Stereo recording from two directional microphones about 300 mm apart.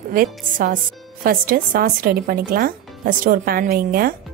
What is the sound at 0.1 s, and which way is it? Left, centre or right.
Speech, right.